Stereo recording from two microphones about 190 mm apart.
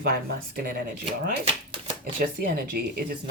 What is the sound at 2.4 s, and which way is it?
Speech, 50° right (ahead or behind).